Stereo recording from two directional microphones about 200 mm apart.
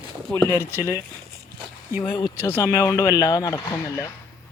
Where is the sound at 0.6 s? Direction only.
10° left (ahead or behind).